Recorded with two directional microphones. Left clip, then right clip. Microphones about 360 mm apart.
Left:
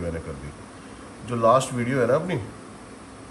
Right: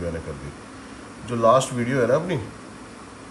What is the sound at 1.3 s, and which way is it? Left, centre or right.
A man's voice, centre.